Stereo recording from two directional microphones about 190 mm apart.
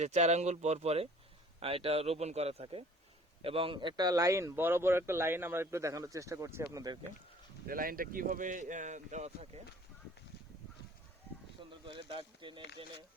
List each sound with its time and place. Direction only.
0.0 s speech: 35° right (ahead or behind); by 7.0 s 20° right (ahead or behind)
7.7 s speech: 50° right (ahead or behind)
11.7 s speech: 25° right (ahead or behind)